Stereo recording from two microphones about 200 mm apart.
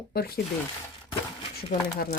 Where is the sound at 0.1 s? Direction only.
50° left (ahead or behind).